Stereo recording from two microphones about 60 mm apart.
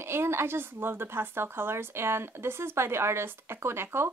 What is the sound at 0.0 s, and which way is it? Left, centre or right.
A woman's voice, right.